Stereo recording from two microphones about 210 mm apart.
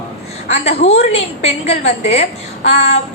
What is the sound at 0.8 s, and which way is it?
A woman's voice, 30° left (ahead or behind).